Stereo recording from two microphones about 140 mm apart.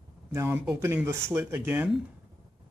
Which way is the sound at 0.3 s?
15° right (ahead or behind).